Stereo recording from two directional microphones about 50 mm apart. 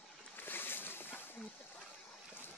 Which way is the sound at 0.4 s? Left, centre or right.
Left.